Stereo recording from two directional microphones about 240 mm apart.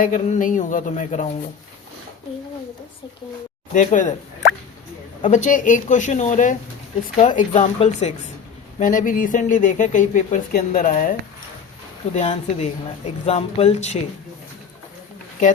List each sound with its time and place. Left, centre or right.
0.0 s speech: left
3.8 s speech: left
5.2 s a woman's voice: left